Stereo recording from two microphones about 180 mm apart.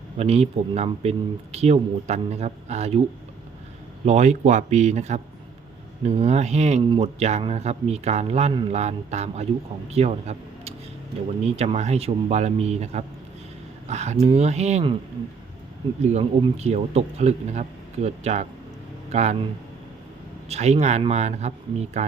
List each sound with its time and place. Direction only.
0.2 s speech: 35° right (ahead or behind)
4.0 s speech: 40° right (ahead or behind)
16.0 s speech: 40° right (ahead or behind)
20.5 s speech: 35° right (ahead or behind)